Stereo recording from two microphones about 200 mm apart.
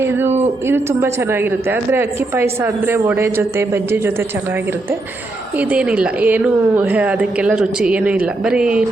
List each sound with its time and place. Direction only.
0.7 s a woman's voice: 10° right (ahead or behind)
5.5 s a woman's voice: 5° right (ahead or behind)